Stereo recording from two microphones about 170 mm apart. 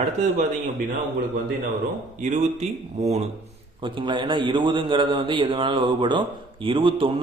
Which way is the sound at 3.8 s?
30° right (ahead or behind).